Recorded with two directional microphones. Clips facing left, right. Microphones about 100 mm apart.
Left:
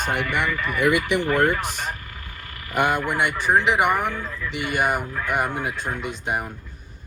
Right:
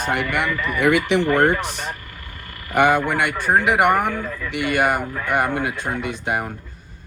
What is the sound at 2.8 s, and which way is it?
A man's voice, 50° right (ahead or behind).